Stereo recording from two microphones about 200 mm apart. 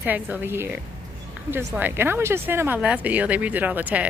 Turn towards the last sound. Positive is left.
turn(degrees=-5)  # may be behind; listen again after turning